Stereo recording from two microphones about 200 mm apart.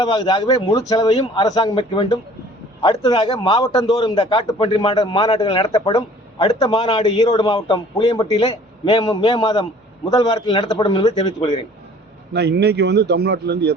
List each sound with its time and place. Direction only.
0.0 s a man's voice: 25° left (ahead or behind)
12.3 s a man's voice: 55° right (ahead or behind)